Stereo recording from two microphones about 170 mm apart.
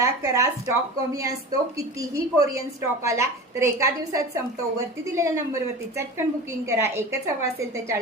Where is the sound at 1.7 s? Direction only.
20° right (ahead or behind).